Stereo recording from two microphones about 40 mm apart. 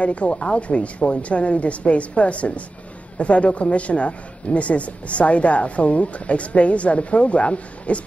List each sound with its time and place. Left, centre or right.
0.0 s speech: left